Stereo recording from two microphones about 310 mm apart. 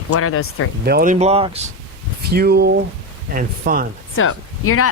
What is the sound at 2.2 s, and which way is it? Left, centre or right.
Speech, right.